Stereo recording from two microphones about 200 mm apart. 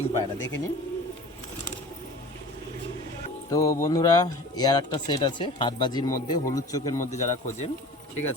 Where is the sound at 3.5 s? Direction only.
15° left (ahead or behind).